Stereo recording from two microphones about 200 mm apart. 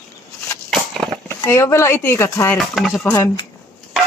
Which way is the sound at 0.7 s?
Centre (ahead or behind).